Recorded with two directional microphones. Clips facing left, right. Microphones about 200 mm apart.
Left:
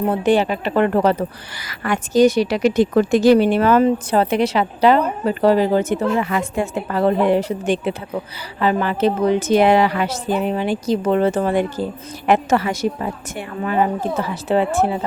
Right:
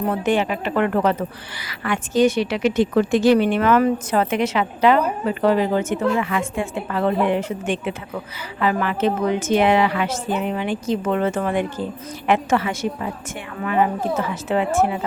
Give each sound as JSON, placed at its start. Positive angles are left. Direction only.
{"t": 0.1, "sound": "a woman's voice", "side_deg": 35}